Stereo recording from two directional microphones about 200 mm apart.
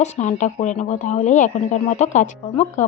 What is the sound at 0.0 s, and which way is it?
A woman's voice, 35° left (ahead or behind).